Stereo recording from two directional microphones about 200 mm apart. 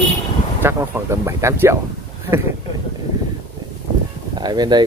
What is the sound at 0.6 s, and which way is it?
Speech, 15° right (ahead or behind).